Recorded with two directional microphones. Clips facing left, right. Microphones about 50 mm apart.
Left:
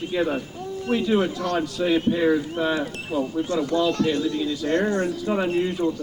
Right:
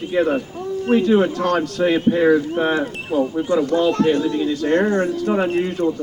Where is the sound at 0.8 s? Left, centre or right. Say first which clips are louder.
Right 6 dB; right.